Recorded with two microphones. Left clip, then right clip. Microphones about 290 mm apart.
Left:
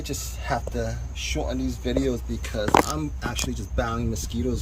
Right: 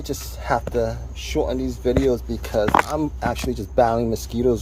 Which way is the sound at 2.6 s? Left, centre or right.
Right.